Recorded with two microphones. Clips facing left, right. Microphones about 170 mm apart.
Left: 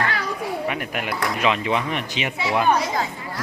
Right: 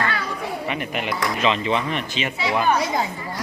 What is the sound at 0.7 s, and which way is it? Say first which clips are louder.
Speech: right 1 dB; 5° left (ahead or behind).